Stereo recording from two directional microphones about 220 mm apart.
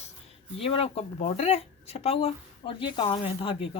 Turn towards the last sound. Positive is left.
turn(degrees=25)  # may be behind; listen again after turning